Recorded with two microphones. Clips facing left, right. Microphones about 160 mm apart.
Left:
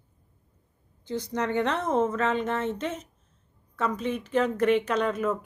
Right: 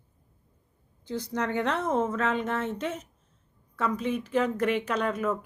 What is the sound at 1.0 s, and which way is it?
Speech, 5° right (ahead or behind).